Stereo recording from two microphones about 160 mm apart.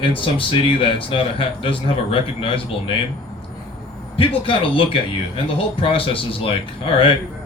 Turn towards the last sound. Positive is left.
turn(degrees=35)  # may be behind; listen again after turning